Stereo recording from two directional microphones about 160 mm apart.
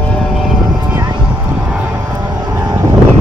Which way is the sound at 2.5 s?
20° right (ahead or behind).